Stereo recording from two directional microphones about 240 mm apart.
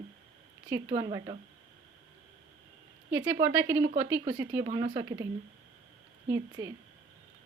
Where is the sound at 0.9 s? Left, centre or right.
Centre.